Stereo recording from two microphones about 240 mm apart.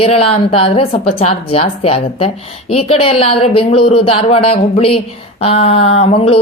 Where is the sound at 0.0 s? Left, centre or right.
Left.